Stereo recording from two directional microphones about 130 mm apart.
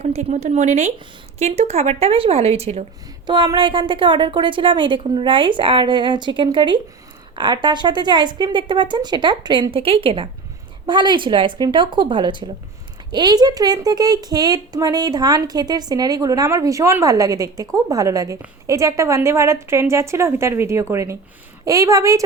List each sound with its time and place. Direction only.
0.0 s a woman's voice: 60° right (ahead or behind)
3.2 s a woman's voice: 35° right (ahead or behind)